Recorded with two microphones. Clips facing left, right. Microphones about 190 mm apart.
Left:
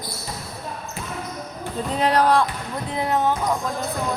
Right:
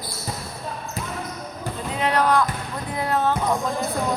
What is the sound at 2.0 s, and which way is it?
Speech, 35° left (ahead or behind).